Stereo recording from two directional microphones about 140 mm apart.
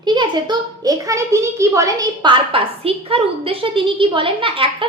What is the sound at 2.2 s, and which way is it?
A woman's voice, 40° right (ahead or behind).